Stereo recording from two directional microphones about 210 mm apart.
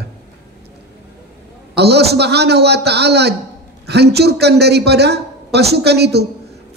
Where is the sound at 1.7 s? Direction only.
50° right (ahead or behind).